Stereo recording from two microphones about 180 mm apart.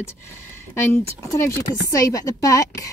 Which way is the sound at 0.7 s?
15° left (ahead or behind).